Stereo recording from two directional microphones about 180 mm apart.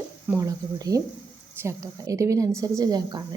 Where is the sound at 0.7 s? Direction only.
20° right (ahead or behind).